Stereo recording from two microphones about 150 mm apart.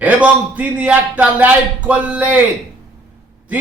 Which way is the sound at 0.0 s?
10° right (ahead or behind).